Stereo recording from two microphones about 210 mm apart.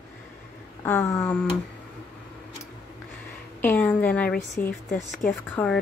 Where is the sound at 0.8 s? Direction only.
15° left (ahead or behind).